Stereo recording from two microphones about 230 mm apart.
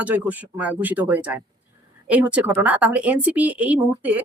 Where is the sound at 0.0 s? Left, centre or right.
Centre.